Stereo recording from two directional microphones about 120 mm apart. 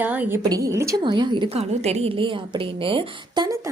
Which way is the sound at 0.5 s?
25° right (ahead or behind).